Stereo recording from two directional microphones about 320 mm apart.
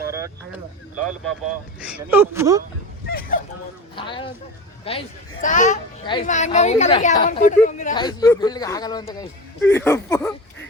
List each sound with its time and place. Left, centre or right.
0.1 s speech: centre
1.8 s speech: centre
3.1 s speech: left
3.9 s speech: centre